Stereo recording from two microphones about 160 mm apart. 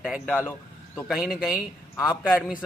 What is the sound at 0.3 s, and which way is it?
Speech, 15° left (ahead or behind).